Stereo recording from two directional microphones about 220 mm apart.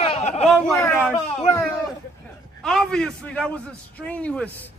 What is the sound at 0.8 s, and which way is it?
Speech, 10° left (ahead or behind).